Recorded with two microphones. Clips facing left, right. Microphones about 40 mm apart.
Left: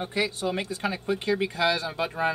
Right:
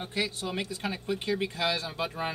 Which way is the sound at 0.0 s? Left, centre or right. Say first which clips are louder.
Left 4 dB; left.